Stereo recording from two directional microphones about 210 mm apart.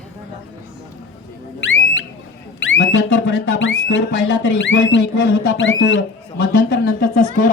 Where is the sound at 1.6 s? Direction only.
65° left (ahead or behind).